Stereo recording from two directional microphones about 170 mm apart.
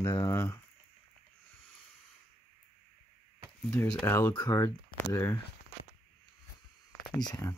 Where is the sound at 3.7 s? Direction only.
5° left (ahead or behind).